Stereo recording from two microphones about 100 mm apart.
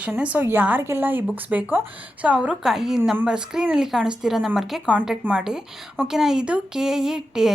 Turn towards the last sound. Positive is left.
turn(degrees=-5)  # may be behind; listen again after turning